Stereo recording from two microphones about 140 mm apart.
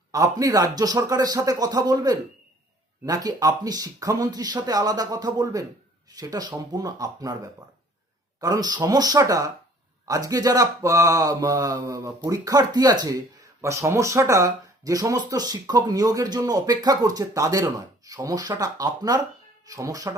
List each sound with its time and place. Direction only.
0.1 s speech: 25° right (ahead or behind)
8.4 s speech: 25° right (ahead or behind)